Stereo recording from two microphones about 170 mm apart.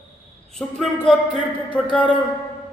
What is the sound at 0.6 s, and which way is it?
A woman's voice, 5° left (ahead or behind).